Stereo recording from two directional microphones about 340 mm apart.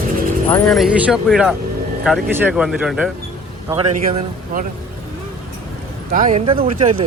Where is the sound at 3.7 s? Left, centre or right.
Right.